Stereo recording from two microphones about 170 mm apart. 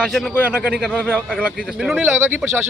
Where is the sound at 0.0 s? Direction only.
Centre (ahead or behind).